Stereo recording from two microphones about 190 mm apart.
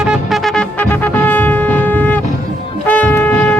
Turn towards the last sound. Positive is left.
turn(degrees=10)  # may be behind; listen again after turning